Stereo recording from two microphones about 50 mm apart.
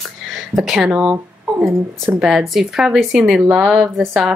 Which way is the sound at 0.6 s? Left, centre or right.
Centre.